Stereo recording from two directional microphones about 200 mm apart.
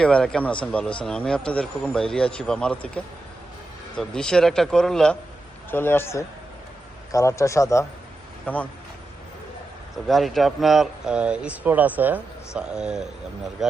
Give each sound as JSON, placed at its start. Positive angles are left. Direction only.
{"t": 0.0, "sound": "speech", "side_deg": 5}
{"t": 10.1, "sound": "speech", "side_deg": 0}